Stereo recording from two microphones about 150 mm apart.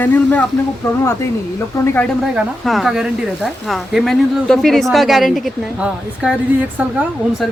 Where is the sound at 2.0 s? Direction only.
Centre (ahead or behind).